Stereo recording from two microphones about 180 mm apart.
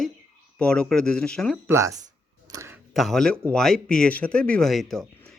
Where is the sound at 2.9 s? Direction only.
Centre (ahead or behind).